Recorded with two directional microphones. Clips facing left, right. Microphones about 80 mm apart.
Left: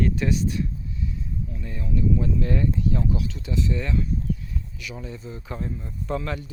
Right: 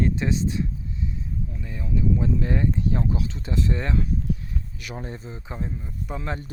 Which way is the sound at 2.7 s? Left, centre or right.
Right.